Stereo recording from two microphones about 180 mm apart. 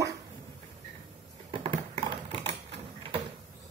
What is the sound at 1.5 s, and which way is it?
Typing, 30° right (ahead or behind).